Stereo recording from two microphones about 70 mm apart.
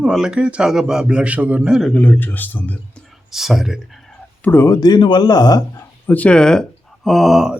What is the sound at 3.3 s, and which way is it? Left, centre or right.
Speech, centre.